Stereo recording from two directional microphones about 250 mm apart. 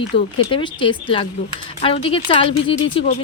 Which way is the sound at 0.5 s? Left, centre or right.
Centre.